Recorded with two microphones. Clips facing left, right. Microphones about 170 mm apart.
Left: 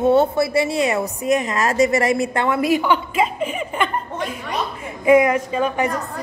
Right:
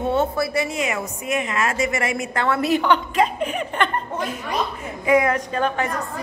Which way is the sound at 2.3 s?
20° left (ahead or behind).